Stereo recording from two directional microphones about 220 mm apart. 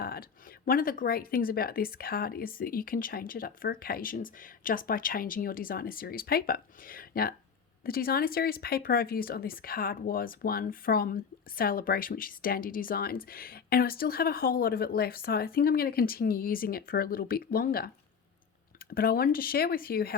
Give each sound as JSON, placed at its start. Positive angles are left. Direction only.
{"t": 0.0, "sound": "speech", "side_deg": 40}
{"t": 18.9, "sound": "speech", "side_deg": 40}